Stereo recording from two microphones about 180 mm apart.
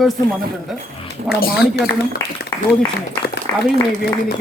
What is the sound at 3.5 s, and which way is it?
Speech, 15° left (ahead or behind).